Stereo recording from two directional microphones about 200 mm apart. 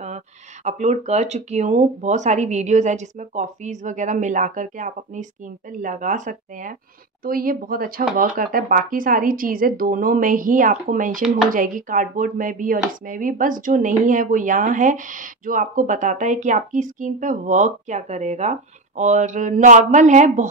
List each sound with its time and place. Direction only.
0.7 s speech: 35° right (ahead or behind)